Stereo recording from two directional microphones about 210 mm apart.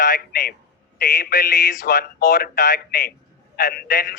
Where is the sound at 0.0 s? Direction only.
45° left (ahead or behind).